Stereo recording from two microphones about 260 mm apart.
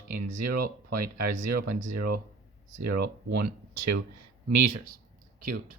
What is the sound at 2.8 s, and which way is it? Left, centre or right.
Speech, right.